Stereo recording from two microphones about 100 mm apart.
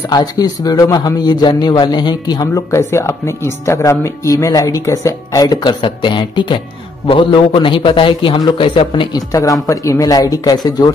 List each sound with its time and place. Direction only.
0.1 s a man's voice: 40° left (ahead or behind)
9.3 s speech: 35° left (ahead or behind)